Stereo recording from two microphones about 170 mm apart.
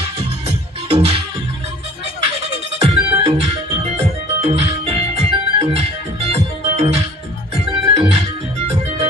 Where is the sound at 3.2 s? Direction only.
35° right (ahead or behind).